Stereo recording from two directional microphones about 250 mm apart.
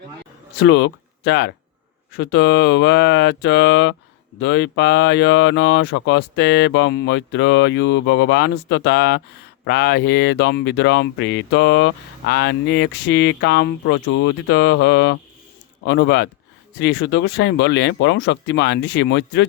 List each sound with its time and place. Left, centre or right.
0.5 s speech: left